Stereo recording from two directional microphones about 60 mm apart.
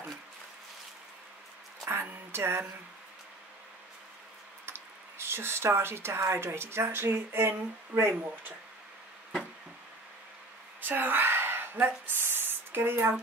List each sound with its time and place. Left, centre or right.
1.9 s music: right
4.6 s speech: right
10.8 s a sound: right